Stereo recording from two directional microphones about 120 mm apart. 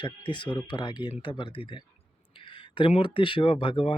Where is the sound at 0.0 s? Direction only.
40° left (ahead or behind).